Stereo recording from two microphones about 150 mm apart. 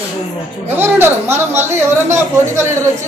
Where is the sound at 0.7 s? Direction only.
15° right (ahead or behind).